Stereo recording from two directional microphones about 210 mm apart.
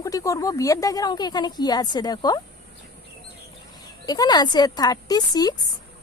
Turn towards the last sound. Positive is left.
turn(degrees=20)  # may be behind; listen again after turning